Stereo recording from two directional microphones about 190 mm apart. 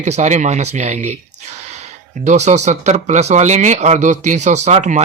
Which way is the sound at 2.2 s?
35° right (ahead or behind).